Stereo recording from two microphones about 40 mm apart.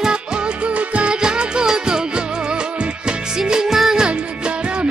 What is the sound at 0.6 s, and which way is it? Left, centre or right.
Music, right.